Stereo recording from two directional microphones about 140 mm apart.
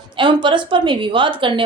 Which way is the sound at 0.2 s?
35° right (ahead or behind).